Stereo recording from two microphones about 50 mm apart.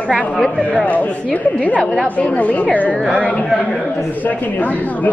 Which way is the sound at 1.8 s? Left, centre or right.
Centre.